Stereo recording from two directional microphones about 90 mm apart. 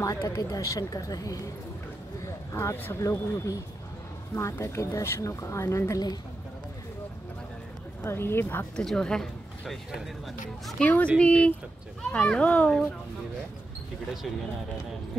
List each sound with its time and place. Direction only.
0.0 s speech: 35° left (ahead or behind)
2.2 s speech: 30° left (ahead or behind)
8.0 s speech: 25° left (ahead or behind)
8.7 s speech: 10° left (ahead or behind)
10.8 s speech: 15° left (ahead or behind)